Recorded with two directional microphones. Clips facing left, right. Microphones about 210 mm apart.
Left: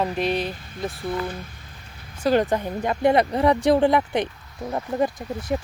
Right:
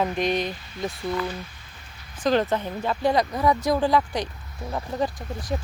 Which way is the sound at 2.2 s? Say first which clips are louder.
Left 2 dB; 10° left (ahead or behind).